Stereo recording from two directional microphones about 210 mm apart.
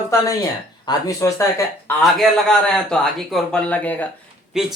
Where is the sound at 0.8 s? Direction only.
20° left (ahead or behind).